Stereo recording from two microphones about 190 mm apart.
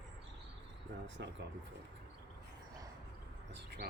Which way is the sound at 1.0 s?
70° right (ahead or behind).